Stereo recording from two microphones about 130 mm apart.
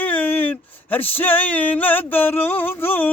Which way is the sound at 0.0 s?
10° left (ahead or behind).